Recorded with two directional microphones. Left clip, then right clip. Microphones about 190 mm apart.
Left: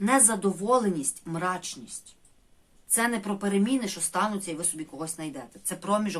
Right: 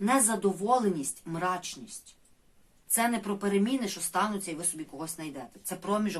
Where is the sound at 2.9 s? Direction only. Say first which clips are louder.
Left 2 dB; 30° left (ahead or behind).